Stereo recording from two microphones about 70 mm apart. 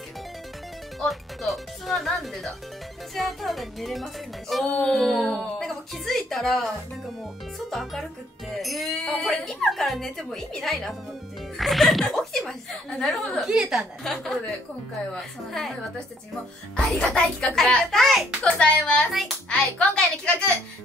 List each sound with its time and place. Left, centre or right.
1.0 s speech: centre
4.6 s female singing: centre
4.9 s speech: centre
7.7 s speech: centre
14.0 s a child's voice: centre
16.7 s a child's voice: centre
18.6 s a child's voice: centre